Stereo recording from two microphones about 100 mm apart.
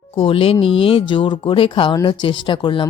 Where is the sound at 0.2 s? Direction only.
65° left (ahead or behind).